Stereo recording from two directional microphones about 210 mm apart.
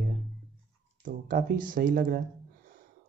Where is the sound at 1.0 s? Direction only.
40° right (ahead or behind).